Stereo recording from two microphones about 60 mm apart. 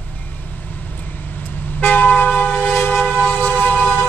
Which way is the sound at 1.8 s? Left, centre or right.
Left.